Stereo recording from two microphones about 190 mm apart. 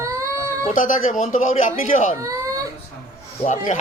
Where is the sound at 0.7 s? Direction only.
45° left (ahead or behind).